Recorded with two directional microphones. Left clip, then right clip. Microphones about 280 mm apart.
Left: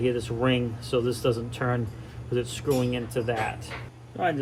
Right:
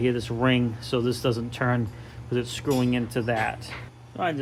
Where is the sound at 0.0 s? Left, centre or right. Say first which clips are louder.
Right 1 dB; right.